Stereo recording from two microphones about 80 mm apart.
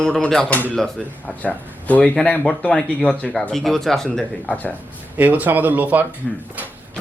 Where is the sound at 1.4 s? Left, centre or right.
Centre.